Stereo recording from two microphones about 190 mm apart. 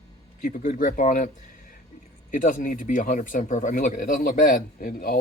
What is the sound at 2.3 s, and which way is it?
Speech, 45° left (ahead or behind).